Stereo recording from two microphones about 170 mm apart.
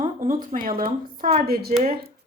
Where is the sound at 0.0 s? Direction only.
50° right (ahead or behind).